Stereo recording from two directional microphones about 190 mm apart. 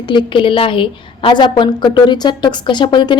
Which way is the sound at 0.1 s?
25° left (ahead or behind).